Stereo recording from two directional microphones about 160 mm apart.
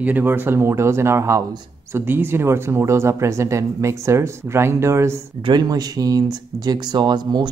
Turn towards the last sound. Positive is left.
turn(degrees=-25)  # may be behind; listen again after turning